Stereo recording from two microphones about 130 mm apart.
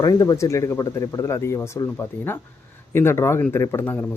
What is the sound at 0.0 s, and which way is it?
Speech, 30° left (ahead or behind).